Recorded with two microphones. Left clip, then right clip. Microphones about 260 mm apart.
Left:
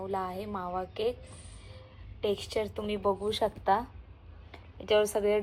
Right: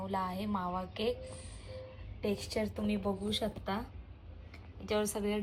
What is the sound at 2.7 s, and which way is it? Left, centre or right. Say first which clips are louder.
Speech: left 3 dB; left.